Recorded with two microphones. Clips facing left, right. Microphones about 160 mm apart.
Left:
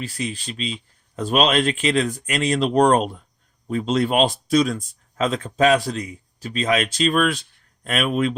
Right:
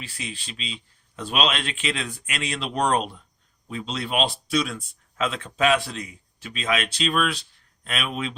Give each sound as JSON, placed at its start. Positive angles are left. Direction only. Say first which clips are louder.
{"t": 0.0, "sound": "speech", "louder": "left 8 dB", "side_deg": 40}